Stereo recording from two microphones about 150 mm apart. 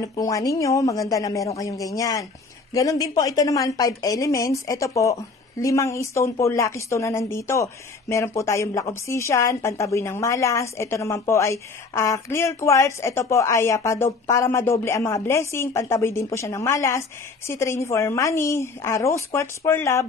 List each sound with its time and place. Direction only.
0.0 s a woman's voice: 20° left (ahead or behind)